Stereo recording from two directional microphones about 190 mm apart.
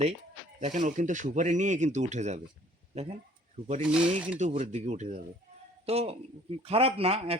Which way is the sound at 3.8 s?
5° right (ahead or behind).